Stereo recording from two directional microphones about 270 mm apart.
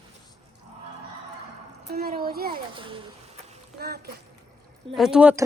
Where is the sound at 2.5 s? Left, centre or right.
Centre.